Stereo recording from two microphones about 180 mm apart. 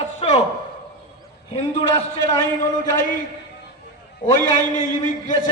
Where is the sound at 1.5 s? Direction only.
40° left (ahead or behind).